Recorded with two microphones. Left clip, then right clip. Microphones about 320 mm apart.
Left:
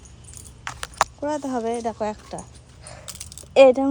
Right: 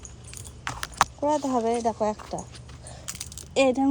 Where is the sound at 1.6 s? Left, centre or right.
Centre.